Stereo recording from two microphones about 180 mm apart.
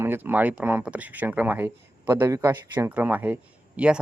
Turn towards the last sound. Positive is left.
turn(degrees=-5)  # may be behind; listen again after turning